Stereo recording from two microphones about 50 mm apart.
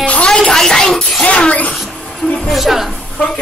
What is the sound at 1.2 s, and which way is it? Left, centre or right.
Speech, left.